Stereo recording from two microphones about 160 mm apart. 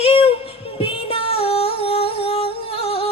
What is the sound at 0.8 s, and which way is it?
Music, 35° left (ahead or behind).